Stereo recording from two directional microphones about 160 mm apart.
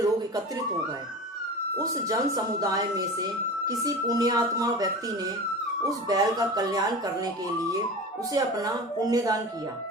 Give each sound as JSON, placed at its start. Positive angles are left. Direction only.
{"t": 1.8, "sound": "speech", "side_deg": -20}
{"t": 8.3, "sound": "speech", "side_deg": -20}